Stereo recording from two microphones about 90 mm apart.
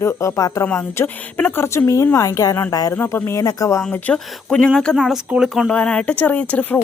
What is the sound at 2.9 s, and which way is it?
Speech, 25° left (ahead or behind).